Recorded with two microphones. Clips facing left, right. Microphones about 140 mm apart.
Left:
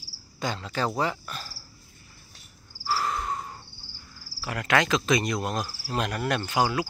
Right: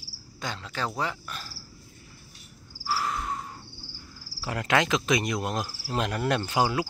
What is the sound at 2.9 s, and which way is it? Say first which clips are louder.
Cricket: left 1 dB; 5° right (ahead or behind).